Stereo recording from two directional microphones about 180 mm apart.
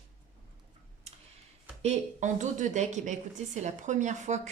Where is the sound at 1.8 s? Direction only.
40° right (ahead or behind).